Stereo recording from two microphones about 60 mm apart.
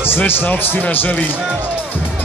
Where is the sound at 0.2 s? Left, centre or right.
Left.